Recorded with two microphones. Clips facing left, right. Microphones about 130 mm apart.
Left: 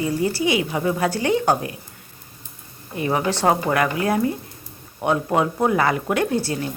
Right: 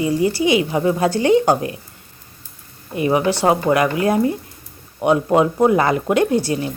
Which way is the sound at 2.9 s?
15° right (ahead or behind).